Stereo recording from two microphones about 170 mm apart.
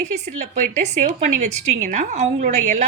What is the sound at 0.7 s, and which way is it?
A woman's voice, 45° right (ahead or behind).